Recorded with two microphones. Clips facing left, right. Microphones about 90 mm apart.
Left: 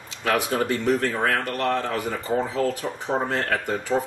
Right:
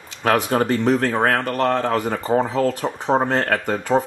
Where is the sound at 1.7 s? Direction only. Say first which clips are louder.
Right 5 dB; 50° right (ahead or behind).